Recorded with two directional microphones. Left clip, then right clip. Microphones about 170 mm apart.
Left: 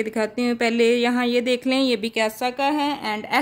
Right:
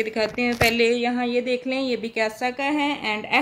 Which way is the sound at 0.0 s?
90° left.